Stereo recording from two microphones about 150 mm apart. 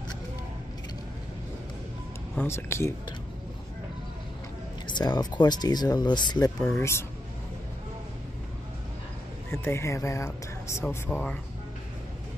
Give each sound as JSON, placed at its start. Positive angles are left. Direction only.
{"t": 2.4, "sound": "speech", "side_deg": 15}
{"t": 4.8, "sound": "speech", "side_deg": 30}
{"t": 6.8, "sound": "speech", "side_deg": 15}
{"t": 9.5, "sound": "speech", "side_deg": 15}